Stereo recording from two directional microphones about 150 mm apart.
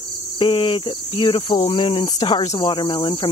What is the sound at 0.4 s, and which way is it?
Speech, 40° left (ahead or behind).